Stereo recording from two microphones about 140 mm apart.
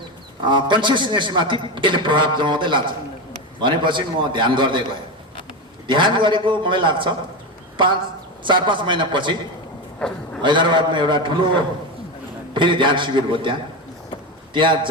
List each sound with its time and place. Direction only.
0.4 s a man's voice: 35° right (ahead or behind)
5.9 s a man's voice: 35° right (ahead or behind)
8.4 s a man's voice: 35° right (ahead or behind)
10.0 s speech: 10° left (ahead or behind)
10.4 s a man's voice: 35° right (ahead or behind)